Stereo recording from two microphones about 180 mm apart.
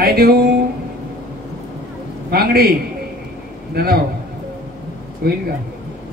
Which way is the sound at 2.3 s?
60° right (ahead or behind).